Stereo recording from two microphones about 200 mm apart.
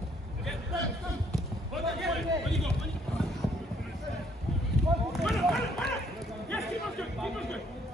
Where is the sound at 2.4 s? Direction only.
Centre (ahead or behind).